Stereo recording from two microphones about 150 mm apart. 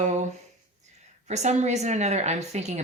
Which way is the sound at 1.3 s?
50° right (ahead or behind).